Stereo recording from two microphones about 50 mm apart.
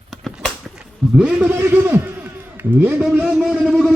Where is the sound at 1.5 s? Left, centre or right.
Right.